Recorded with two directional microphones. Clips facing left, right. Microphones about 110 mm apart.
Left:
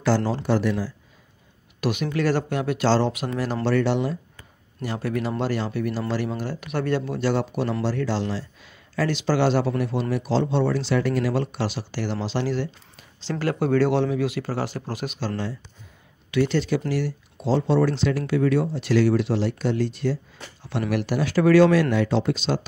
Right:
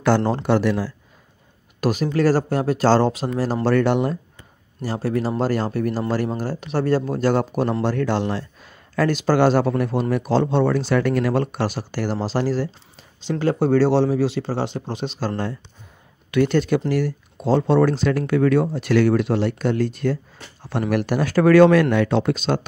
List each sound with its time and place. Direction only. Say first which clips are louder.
0.0 s speech: right 4 dB; 55° right (ahead or behind); by 0.9 s 75° right (ahead or behind)
1.8 s speech: right 5 dB; 40° right (ahead or behind)
4.8 s speech: right 4 dB; 35° right (ahead or behind)
5.4 s speech: right 4 dB; 45° right (ahead or behind)
13.2 s speech: right 4 dB; 20° right (ahead or behind)
15.1 s speech: right 4 dB; 50° right (ahead or behind)